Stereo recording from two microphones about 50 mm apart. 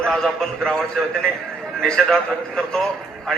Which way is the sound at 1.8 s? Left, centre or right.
Centre.